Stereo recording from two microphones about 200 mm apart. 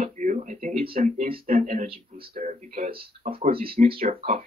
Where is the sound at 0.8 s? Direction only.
30° right (ahead or behind).